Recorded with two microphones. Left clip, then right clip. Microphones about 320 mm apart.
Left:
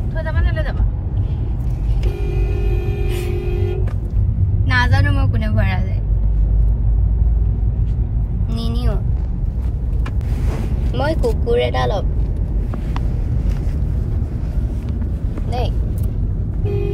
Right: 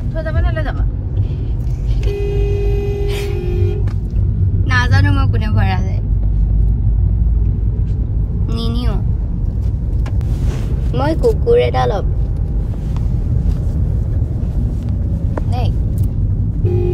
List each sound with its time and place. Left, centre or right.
4.6 s vehicle: centre
8.5 s vehicle: centre
10.9 s vehicle: right